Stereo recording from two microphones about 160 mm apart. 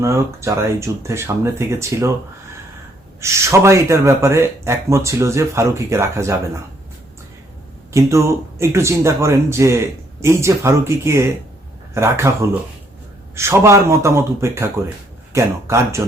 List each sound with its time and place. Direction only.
0.0 s speech: 20° right (ahead or behind)
3.2 s speech: 20° right (ahead or behind)
7.9 s speech: 20° right (ahead or behind)